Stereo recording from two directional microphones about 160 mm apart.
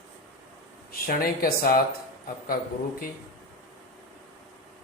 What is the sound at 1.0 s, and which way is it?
Speech, 65° left (ahead or behind).